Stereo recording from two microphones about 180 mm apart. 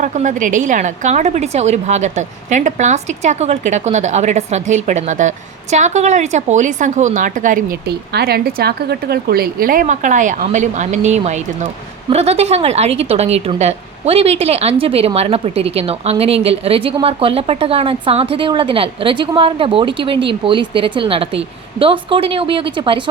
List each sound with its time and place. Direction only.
0.0 s a woman's voice: 45° right (ahead or behind); by 23.0 s 25° right (ahead or behind)